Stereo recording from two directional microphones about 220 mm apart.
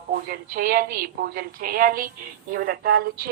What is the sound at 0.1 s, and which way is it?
A woman's voice, 40° right (ahead or behind).